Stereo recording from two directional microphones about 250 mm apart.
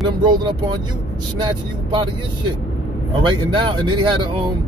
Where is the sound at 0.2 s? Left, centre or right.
Centre.